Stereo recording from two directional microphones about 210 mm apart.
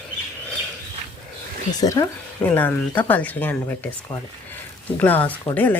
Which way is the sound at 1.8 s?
15° left (ahead or behind).